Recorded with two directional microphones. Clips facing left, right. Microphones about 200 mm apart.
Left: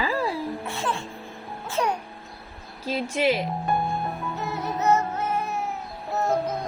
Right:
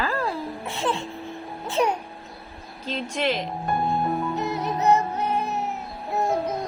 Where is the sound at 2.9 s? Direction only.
10° left (ahead or behind).